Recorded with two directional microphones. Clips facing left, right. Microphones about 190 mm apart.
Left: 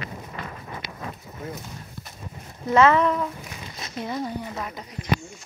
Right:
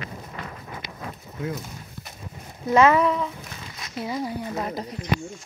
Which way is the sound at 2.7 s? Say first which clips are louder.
Even; 15° right (ahead or behind).